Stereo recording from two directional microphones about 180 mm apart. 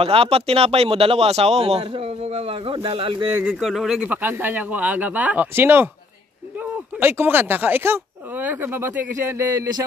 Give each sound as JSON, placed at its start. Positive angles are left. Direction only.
{"t": 0.0, "sound": "speech", "side_deg": -30}
{"t": 3.3, "sound": "speech", "side_deg": -5}